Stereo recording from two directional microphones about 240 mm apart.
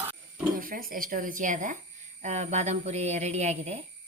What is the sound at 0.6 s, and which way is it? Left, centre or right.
A woman's voice, right.